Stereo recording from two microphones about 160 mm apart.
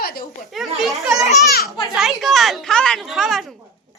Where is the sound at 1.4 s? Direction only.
75° left (ahead or behind).